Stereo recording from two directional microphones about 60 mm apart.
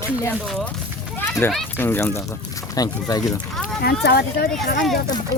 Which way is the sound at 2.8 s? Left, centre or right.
Left.